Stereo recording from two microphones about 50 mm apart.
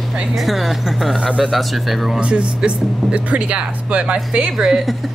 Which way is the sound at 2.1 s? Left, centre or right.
Right.